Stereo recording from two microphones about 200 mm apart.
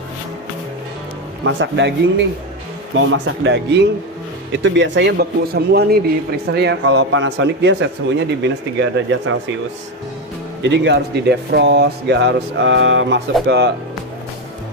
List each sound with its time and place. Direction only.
1.4 s a man's voice: 65° right (ahead or behind)
10.6 s a man's voice: 60° right (ahead or behind)